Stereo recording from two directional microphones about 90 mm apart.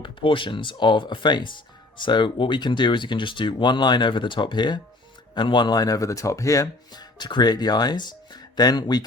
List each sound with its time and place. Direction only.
0.0 s speech: 70° left (ahead or behind); by 6.7 s 35° left (ahead or behind)
6.9 s speech: 50° left (ahead or behind)